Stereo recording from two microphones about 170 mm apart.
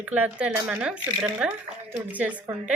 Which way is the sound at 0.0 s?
10° right (ahead or behind).